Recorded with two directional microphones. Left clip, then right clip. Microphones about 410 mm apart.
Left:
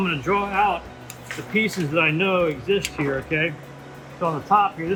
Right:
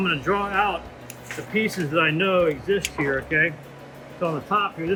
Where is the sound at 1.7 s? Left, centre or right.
Centre.